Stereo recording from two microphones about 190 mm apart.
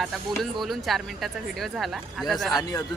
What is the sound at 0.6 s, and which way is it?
Speech, centre (ahead or behind).